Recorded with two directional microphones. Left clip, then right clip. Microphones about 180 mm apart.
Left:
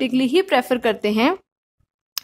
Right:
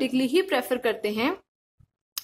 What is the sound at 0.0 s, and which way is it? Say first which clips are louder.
Speech: left 5 dB; 30° left (ahead or behind).